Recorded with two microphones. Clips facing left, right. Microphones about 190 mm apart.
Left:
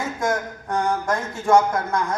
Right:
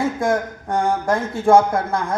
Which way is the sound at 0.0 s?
30° right (ahead or behind).